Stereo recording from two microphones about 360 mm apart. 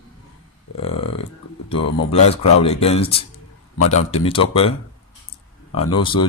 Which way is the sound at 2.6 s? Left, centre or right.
Centre.